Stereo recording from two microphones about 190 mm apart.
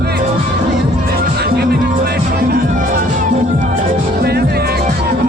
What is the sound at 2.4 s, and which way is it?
Music, 55° right (ahead or behind).